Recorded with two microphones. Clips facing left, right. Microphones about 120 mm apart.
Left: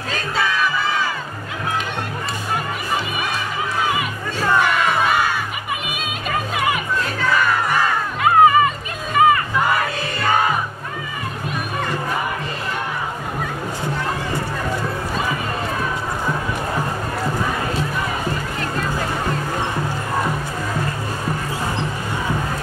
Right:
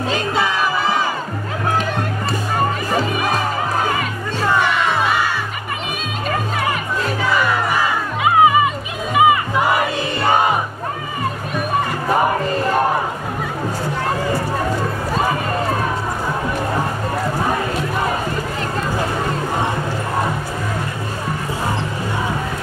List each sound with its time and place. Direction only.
0.1 s crowd: 25° right (ahead or behind)
3.0 s music: 40° right (ahead or behind)
4.6 s crowd: centre (ahead or behind)
7.2 s crowd: 10° right (ahead or behind)
9.1 s music: 10° right (ahead or behind)